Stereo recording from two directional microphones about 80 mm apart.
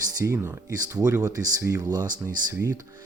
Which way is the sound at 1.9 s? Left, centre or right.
Right.